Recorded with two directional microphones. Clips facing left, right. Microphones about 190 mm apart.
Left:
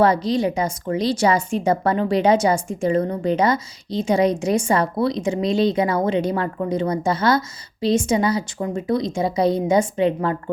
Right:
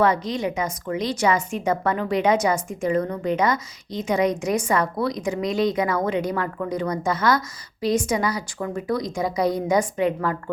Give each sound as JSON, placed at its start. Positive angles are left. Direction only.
{"t": 0.0, "sound": "a woman's voice", "side_deg": 35}